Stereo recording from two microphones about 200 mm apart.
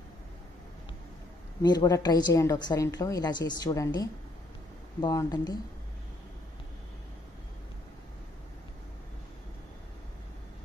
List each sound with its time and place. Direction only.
1.6 s a woman's voice: 20° left (ahead or behind)